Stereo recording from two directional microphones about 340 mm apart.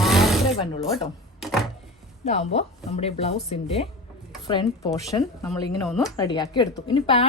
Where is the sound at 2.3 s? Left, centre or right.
Centre.